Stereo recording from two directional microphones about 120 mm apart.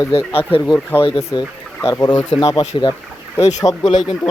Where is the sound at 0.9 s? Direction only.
20° left (ahead or behind).